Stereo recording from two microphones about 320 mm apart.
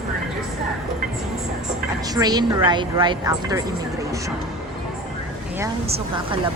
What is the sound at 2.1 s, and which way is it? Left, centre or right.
A woman's voice, centre.